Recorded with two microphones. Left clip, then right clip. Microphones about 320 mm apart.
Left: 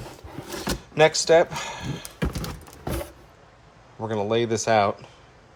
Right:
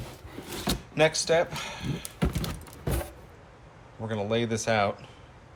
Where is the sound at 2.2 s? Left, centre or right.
Centre.